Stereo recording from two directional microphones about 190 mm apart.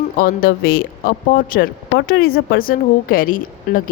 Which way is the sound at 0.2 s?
50° left (ahead or behind).